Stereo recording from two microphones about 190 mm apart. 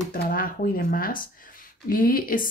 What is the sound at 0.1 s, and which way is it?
Speech, 50° left (ahead or behind).